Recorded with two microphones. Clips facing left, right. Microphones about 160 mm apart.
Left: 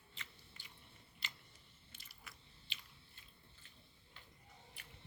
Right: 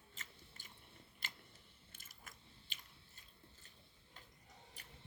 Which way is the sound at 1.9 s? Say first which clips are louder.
Even; 45° right (ahead or behind).